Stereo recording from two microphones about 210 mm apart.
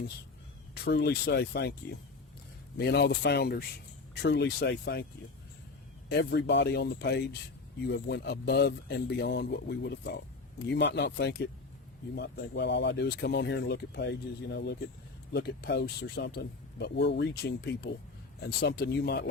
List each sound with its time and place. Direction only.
0.7 s speech: 50° left (ahead or behind)
6.1 s speech: 55° left (ahead or behind)